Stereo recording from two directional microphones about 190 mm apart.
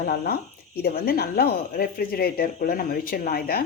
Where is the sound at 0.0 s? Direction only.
55° left (ahead or behind).